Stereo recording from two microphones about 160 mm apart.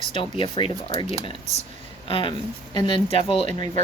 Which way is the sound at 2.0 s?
35° left (ahead or behind).